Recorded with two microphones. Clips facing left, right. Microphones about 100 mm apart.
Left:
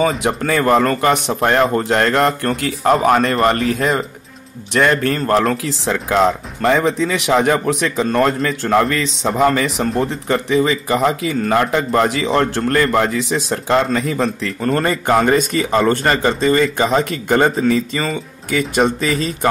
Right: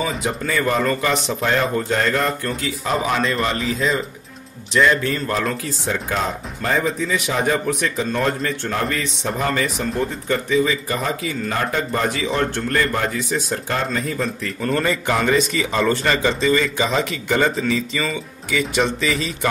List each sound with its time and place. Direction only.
0.2 s a man's voice: 60° left (ahead or behind); by 14.5 s 90° left
14.6 s a man's voice: 40° left (ahead or behind)